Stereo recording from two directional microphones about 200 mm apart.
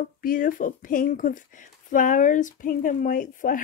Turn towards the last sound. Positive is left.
turn(degrees=40)  # may be behind; listen again after turning